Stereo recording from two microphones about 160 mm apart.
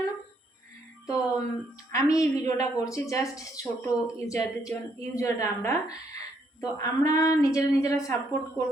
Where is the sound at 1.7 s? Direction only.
20° left (ahead or behind).